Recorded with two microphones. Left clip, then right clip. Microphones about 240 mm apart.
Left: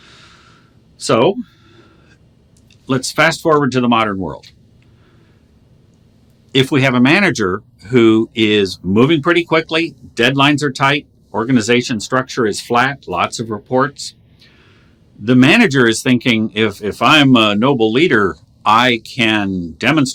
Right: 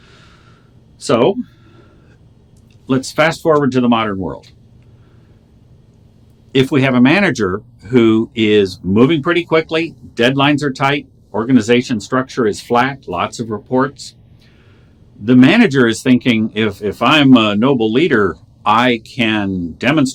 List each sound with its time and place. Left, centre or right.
0.0 s a sound: left
2.8 s speech: left
6.5 s speech: left